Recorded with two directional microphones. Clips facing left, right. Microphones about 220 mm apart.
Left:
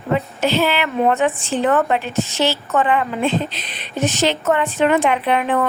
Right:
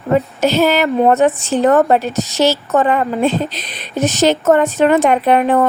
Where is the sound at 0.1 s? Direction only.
40° right (ahead or behind).